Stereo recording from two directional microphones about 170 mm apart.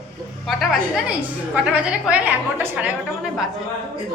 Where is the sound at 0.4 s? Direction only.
Centre (ahead or behind).